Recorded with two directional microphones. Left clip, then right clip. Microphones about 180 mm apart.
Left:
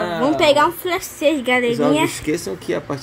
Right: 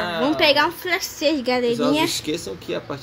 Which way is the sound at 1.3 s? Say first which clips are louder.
Left 3 dB; 5° right (ahead or behind).